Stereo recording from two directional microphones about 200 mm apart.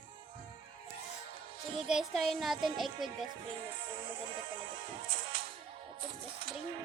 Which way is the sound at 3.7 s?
25° right (ahead or behind).